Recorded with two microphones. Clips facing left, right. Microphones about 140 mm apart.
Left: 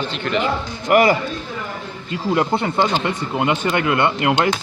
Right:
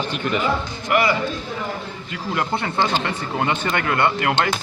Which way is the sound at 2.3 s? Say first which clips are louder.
Left 4 dB; 20° left (ahead or behind).